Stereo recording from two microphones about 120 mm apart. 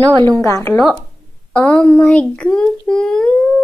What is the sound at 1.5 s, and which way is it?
A child's voice, 10° left (ahead or behind).